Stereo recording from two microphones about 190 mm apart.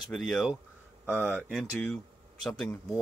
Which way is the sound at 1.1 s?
10° right (ahead or behind).